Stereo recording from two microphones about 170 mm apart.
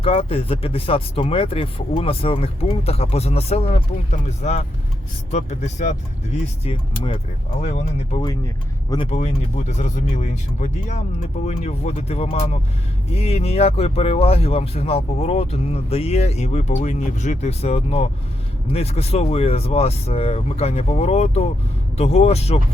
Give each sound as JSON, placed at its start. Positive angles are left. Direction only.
{"t": 0.0, "sound": "speech", "side_deg": 35}